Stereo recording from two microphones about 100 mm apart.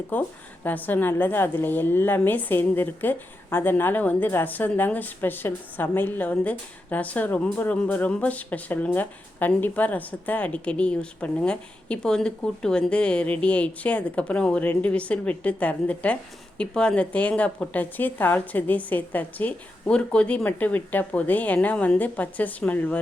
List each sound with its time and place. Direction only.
0.1 s a woman's voice: 15° left (ahead or behind)